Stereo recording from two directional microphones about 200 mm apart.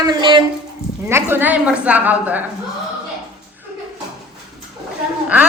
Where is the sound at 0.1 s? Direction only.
25° right (ahead or behind).